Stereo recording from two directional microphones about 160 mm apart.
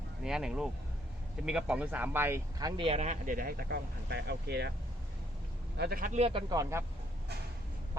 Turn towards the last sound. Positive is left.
turn(degrees=-20)  # may be behind; listen again after turning